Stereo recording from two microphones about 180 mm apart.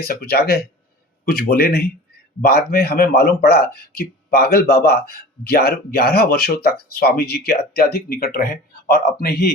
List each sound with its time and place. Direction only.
0.0 s speech: 60° left (ahead or behind)